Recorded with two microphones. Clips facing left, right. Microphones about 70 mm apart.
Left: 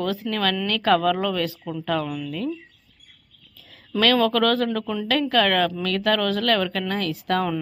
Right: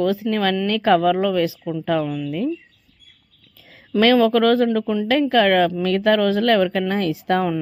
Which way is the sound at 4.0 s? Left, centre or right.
Centre.